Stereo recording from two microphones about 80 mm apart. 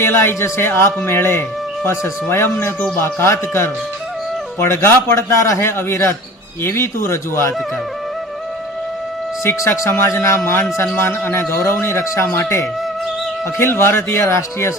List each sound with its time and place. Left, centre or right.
0.0 s speech: left
9.4 s speech: left